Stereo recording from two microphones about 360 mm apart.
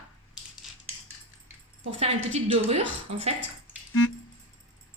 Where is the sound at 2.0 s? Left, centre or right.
Centre.